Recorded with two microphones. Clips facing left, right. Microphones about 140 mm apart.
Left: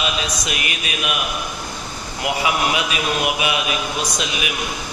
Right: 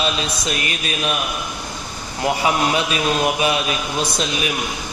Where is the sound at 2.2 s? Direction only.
35° right (ahead or behind).